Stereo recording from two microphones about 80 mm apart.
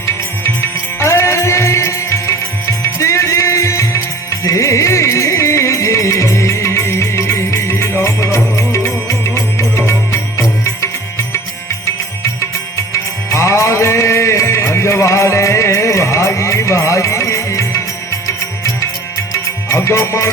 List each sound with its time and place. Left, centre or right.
0.9 s music: left
12.9 s music: left
19.3 s music: left